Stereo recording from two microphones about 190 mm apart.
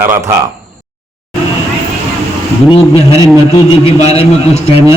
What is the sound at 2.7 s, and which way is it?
A man's voice, 30° left (ahead or behind).